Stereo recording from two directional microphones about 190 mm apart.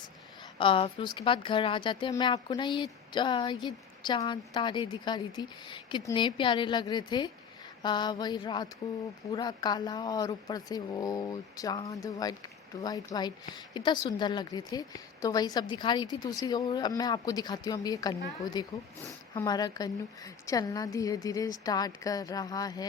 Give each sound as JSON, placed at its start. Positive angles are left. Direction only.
{"t": 0.6, "sound": "a woman's voice", "side_deg": 25}